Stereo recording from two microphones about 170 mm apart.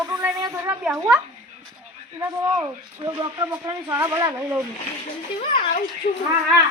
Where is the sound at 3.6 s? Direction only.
15° right (ahead or behind).